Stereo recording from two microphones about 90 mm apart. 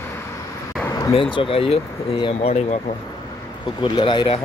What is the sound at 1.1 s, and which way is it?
Speech, 75° left (ahead or behind).